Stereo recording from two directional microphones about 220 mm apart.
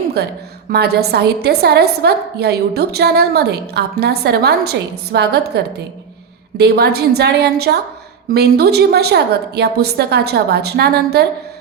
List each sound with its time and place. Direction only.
0.2 s a woman's voice: 45° right (ahead or behind)